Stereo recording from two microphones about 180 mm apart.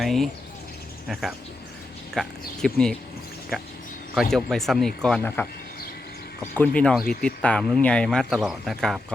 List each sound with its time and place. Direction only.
0.0 s speech: centre (ahead or behind)
4.1 s speech: centre (ahead or behind)
6.6 s speech: 5° left (ahead or behind)
7.0 s speech: 55° left (ahead or behind)
7.3 s speech: 5° left (ahead or behind)